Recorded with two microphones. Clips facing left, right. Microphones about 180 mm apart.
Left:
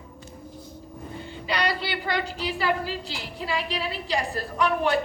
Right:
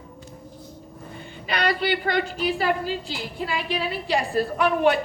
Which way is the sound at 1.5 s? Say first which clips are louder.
Right 4 dB; 55° right (ahead or behind).